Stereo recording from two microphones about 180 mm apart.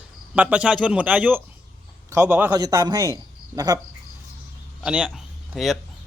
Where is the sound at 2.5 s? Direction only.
20° right (ahead or behind).